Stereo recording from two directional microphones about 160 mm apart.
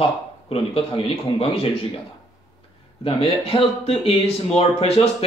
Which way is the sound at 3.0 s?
35° left (ahead or behind).